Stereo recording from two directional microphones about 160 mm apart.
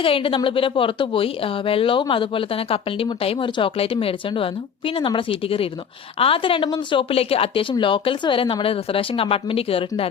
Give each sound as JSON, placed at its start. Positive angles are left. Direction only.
{"t": 0.0, "sound": "a woman's voice", "side_deg": 35}